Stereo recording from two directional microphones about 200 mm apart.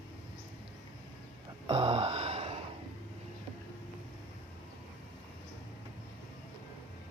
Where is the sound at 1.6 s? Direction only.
25° right (ahead or behind).